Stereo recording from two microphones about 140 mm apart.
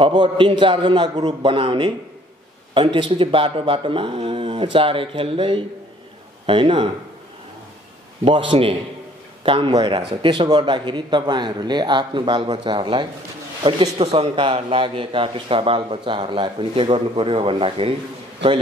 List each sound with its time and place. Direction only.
0.0 s a man's voice: 35° right (ahead or behind)
8.2 s a man's voice: 35° right (ahead or behind)